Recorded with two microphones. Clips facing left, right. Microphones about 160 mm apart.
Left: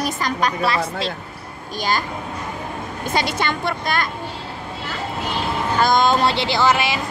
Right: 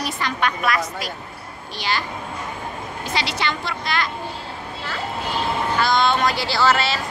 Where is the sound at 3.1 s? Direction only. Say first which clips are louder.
Left 3 dB; 50° left (ahead or behind).